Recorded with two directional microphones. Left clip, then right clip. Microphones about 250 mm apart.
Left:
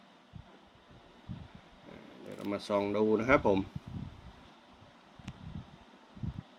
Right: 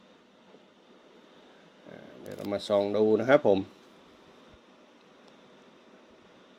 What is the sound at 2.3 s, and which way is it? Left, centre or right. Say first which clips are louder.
Speech: right 5 dB; centre.